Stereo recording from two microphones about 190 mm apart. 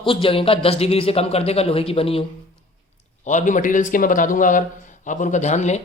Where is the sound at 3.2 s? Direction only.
40° left (ahead or behind).